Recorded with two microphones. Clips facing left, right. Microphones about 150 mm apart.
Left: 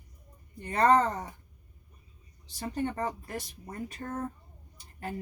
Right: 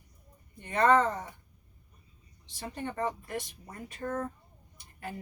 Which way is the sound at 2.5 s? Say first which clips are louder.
Left 5 dB; 40° left (ahead or behind).